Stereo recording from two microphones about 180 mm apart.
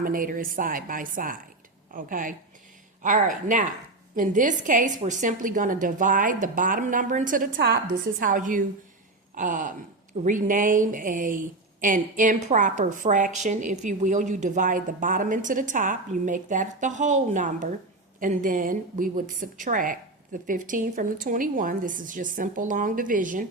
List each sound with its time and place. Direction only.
0.0 s a woman's voice: 50° right (ahead or behind)